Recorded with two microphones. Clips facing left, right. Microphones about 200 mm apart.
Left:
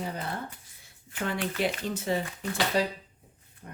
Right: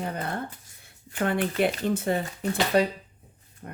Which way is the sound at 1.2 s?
55° right (ahead or behind).